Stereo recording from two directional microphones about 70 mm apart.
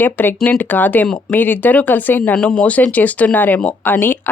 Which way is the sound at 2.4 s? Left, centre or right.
Centre.